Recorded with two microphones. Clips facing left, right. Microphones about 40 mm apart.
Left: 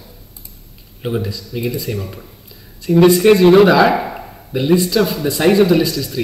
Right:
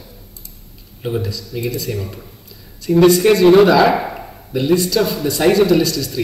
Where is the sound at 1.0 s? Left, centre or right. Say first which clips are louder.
Left 1 dB; centre.